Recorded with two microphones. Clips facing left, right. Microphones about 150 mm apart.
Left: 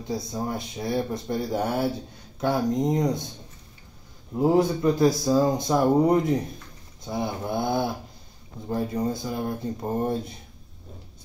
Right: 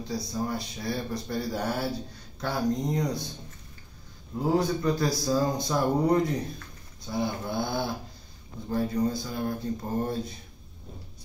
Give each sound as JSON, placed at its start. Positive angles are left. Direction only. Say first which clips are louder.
{"t": 0.1, "sound": "speech", "louder": "left 2 dB", "side_deg": 25}
{"t": 4.6, "sound": "speech", "louder": "left 4 dB", "side_deg": 25}